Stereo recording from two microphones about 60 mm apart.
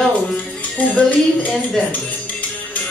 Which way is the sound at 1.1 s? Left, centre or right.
Left.